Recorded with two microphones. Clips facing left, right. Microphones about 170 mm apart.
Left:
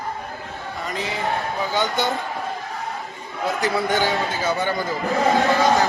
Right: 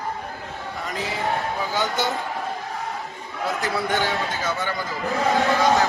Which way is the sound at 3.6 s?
Centre (ahead or behind).